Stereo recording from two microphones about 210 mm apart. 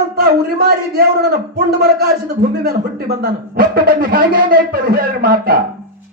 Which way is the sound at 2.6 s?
45° right (ahead or behind).